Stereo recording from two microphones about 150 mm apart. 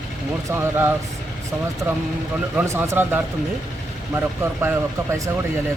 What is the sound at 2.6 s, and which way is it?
Speech, 15° right (ahead or behind).